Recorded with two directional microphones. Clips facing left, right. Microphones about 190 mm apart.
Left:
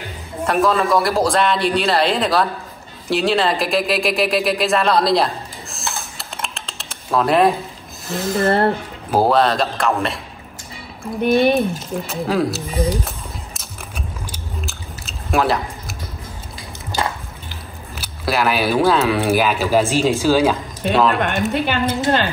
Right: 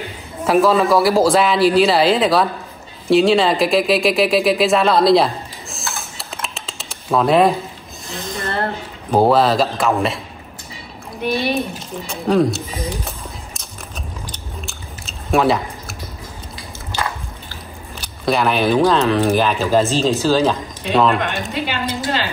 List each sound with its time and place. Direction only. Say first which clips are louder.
0.5 s a man's voice: right 3 dB; centre (ahead or behind)
9.1 s a man's voice: right 2 dB; centre (ahead or behind)
11.2 s a woman's voice: left 5 dB; 50° left (ahead or behind)
12.1 s speech: right 4 dB; centre (ahead or behind)
14.3 s biting: left 2 dB; centre (ahead or behind)
18.0 s speech: right 2 dB; 5° left (ahead or behind)
21.2 s a woman's voice: left 3 dB; 50° left (ahead or behind)